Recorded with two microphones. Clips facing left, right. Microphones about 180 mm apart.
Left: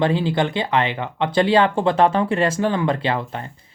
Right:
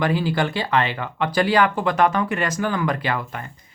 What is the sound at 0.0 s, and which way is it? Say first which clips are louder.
Speech: left 2 dB; 25° left (ahead or behind).